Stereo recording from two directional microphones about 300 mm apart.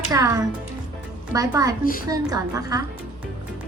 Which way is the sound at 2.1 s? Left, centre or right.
Centre.